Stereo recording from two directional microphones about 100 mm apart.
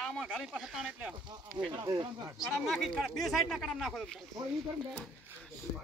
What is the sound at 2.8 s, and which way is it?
Speech, 5° left (ahead or behind).